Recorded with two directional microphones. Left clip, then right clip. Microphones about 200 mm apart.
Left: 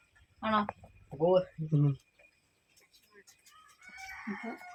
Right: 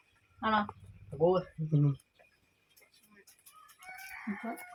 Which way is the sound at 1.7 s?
5° right (ahead or behind).